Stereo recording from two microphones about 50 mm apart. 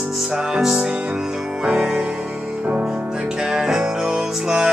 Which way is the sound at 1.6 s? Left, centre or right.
Right.